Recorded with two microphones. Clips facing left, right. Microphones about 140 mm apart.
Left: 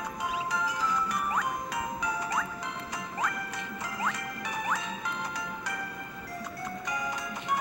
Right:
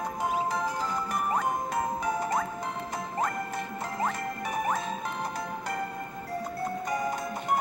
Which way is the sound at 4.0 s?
50° right (ahead or behind).